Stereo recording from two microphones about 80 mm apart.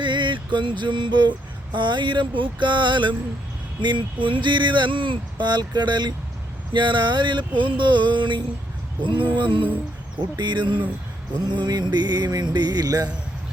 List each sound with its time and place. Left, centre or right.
0.0 s a sound: right
3.8 s speech: right
6.7 s speech: right
9.0 s female singing: right
10.3 s speech: right
11.4 s music: right